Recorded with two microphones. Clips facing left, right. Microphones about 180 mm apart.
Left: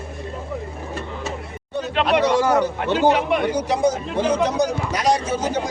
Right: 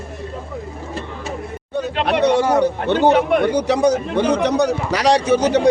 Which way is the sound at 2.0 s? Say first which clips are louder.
Right 2 dB; 65° right (ahead or behind).